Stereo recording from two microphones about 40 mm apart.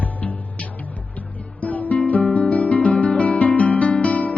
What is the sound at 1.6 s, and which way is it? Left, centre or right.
Music, left.